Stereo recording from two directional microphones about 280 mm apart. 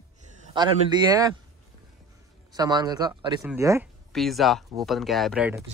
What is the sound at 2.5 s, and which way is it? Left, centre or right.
Speech, centre.